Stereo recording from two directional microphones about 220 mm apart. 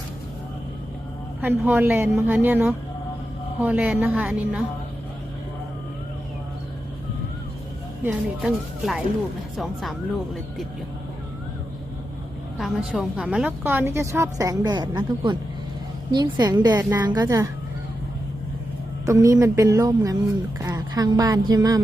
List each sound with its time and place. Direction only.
1.4 s a woman's voice: 10° right (ahead or behind)
8.0 s speech: 5° right (ahead or behind)
12.5 s a woman's voice: centre (ahead or behind)
19.0 s a woman's voice: 15° right (ahead or behind)